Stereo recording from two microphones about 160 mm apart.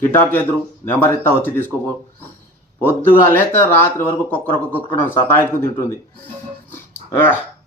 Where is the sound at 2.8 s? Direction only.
10° left (ahead or behind).